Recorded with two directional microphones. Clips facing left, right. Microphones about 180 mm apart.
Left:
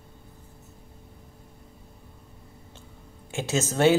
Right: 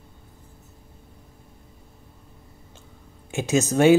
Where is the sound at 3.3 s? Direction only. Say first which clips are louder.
Right 5 dB; 15° right (ahead or behind).